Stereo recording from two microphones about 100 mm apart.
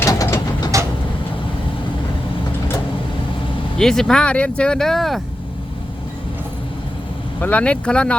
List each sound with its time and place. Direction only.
0.0 s vehicle: 30° left (ahead or behind)
3.8 s speech: 5° left (ahead or behind)
7.4 s speech: 10° left (ahead or behind)